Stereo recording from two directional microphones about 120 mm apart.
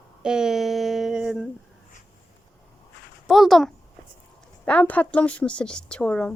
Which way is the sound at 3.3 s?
Centre (ahead or behind).